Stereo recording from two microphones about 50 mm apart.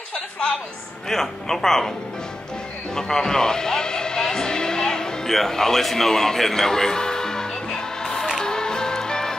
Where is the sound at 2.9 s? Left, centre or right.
Centre.